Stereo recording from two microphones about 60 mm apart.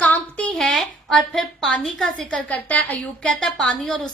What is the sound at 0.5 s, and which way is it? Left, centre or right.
A woman's voice, centre.